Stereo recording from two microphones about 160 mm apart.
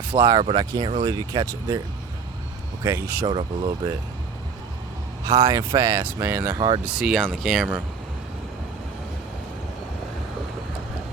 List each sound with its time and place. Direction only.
0.1 s speech: 25° right (ahead or behind)
2.8 s speech: 20° right (ahead or behind)
5.2 s speech: 30° right (ahead or behind); by 6.6 s 15° right (ahead or behind)
6.6 s speech: 25° right (ahead or behind)
6.8 s speech: 5° right (ahead or behind)